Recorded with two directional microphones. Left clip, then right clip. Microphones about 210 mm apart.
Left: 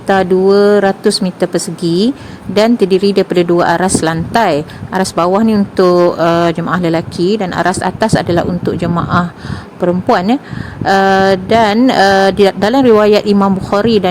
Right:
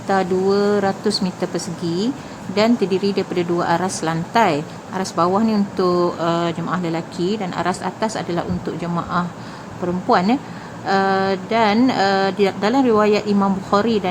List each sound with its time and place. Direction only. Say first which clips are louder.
0.1 s speech: left 8 dB; 30° left (ahead or behind)